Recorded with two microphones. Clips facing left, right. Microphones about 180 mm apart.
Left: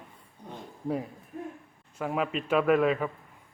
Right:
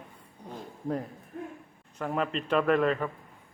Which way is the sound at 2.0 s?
5° left (ahead or behind).